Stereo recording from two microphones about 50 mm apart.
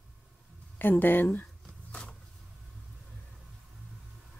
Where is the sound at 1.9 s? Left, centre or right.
Left.